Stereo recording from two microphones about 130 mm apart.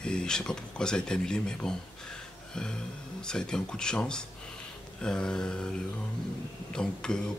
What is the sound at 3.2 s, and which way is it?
Speech, 5° left (ahead or behind).